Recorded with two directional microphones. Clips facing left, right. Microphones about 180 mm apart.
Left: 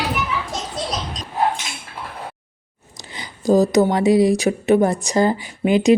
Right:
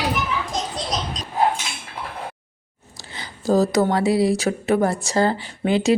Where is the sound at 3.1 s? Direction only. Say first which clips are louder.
Left 3 dB; 15° left (ahead or behind).